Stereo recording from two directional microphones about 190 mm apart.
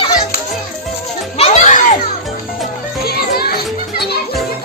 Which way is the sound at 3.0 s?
55° left (ahead or behind).